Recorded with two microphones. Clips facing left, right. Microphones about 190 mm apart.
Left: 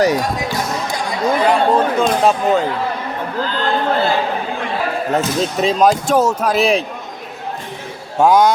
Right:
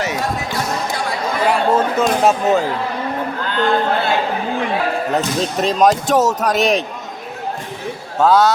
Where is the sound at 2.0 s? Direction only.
5° right (ahead or behind).